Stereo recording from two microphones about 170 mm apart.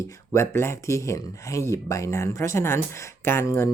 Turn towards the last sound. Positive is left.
turn(degrees=15)  # may be behind; listen again after turning